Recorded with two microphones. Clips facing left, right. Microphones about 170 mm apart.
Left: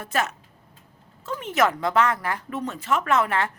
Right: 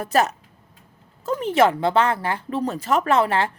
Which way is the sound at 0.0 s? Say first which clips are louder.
Right 6 dB; 35° right (ahead or behind).